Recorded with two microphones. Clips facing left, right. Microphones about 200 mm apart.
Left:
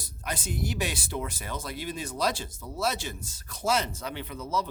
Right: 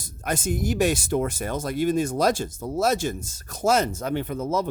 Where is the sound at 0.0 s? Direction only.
50° right (ahead or behind).